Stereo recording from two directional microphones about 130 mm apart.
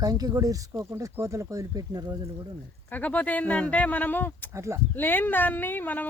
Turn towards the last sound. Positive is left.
turn(degrees=15)  # may be behind; listen again after turning